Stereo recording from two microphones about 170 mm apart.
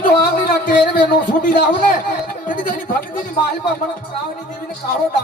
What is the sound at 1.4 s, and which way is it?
A man's voice, 50° left (ahead or behind).